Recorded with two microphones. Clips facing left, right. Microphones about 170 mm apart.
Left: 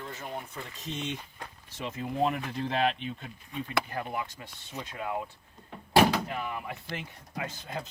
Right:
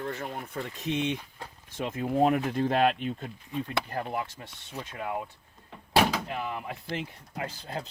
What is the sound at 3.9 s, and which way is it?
Speech, 30° right (ahead or behind).